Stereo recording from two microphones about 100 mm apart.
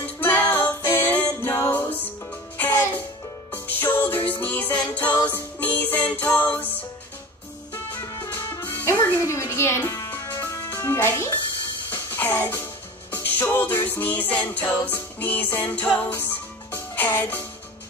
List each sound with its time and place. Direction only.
0.0 s music: 20° left (ahead or behind)
7.7 s music: 30° left (ahead or behind)
9.2 s a sound: 30° left (ahead or behind)
9.5 s music: 25° left (ahead or behind)
10.3 s music: 35° left (ahead or behind); by 17.4 s 15° left (ahead or behind)